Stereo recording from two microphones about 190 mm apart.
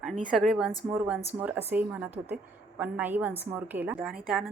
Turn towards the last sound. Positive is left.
turn(degrees=0)  # may be behind; listen again after turning